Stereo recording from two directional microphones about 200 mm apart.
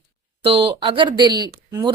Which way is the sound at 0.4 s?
25° right (ahead or behind).